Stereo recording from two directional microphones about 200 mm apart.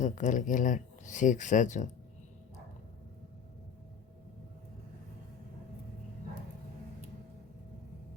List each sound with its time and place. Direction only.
0.0 s speech: 40° left (ahead or behind)